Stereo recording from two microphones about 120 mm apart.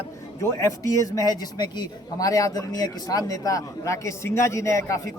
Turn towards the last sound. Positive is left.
turn(degrees=25)  # may be behind; listen again after turning